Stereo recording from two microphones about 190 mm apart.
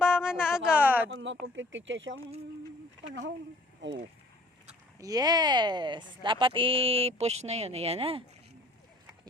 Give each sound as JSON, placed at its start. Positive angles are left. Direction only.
{"t": 0.0, "sound": "a sound", "side_deg": -5}
{"t": 1.1, "sound": "speech", "side_deg": -75}
{"t": 4.9, "sound": "speech", "side_deg": -20}